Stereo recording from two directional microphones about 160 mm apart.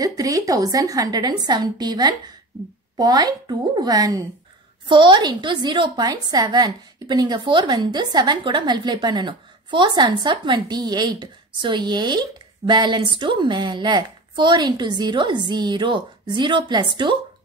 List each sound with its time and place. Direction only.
0.0 s a woman's voice: 20° right (ahead or behind)